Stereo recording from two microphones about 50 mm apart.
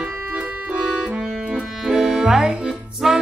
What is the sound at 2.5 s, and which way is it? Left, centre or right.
Music, right.